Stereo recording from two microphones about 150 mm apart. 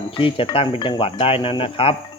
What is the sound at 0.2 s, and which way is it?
Speech, 35° left (ahead or behind).